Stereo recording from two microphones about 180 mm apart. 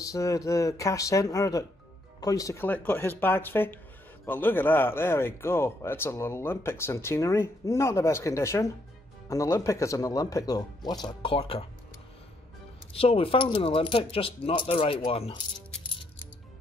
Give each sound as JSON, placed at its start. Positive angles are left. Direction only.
{"t": 0.0, "sound": "speech", "side_deg": 20}
{"t": 12.9, "sound": "speech", "side_deg": 30}